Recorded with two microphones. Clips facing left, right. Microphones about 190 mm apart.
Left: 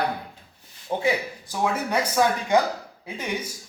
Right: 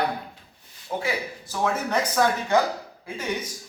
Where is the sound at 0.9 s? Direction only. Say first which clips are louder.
Left 2 dB; 30° left (ahead or behind).